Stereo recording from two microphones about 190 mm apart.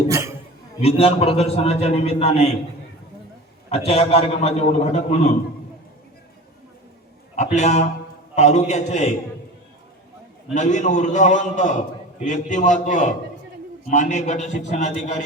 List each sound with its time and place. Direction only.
0.1 s a sound: 15° right (ahead or behind)
0.8 s a man's voice: 35° left (ahead or behind)
3.7 s a man's voice: 30° left (ahead or behind)
7.5 s a man's voice: 40° left (ahead or behind)
10.5 s a man's voice: 40° left (ahead or behind)